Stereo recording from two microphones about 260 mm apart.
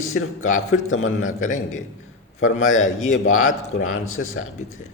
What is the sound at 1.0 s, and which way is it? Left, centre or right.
Speech, left.